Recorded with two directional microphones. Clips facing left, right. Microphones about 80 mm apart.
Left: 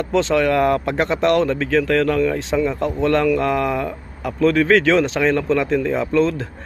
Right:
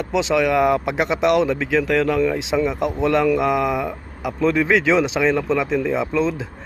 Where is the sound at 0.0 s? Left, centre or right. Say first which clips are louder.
Left 2 dB; centre.